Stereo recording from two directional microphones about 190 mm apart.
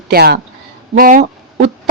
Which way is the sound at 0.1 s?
55° right (ahead or behind).